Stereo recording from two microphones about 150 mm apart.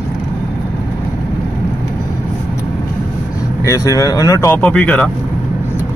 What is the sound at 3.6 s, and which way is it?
Speech, 20° left (ahead or behind).